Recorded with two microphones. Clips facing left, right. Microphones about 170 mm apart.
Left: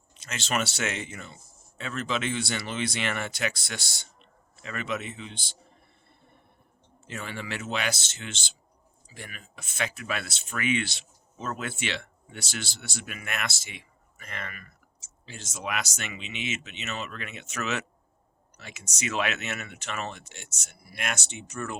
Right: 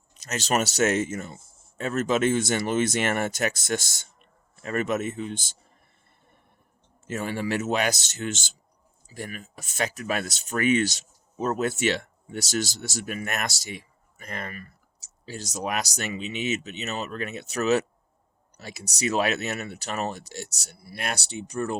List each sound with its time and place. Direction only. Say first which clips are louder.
0.2 s speech: right 5 dB; 40° right (ahead or behind)
7.1 s speech: right 8 dB; 45° right (ahead or behind)